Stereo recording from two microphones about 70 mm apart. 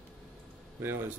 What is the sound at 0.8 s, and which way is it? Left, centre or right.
Speech, right.